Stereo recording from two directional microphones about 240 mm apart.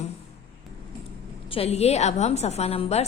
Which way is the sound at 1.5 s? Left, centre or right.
Left.